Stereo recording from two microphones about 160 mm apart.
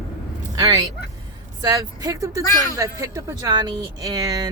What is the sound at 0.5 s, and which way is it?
Speech, 20° right (ahead or behind).